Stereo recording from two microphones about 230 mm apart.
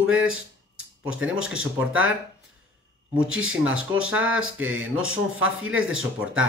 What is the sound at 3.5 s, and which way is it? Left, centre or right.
Speech, centre.